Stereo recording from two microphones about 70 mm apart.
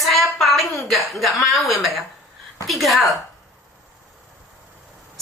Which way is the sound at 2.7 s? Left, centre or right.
Centre.